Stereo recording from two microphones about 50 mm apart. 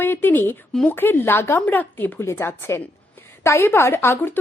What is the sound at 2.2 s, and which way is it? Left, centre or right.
A woman's voice, left.